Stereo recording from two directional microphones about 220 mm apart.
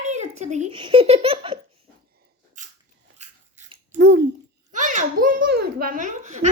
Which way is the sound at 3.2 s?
30° right (ahead or behind).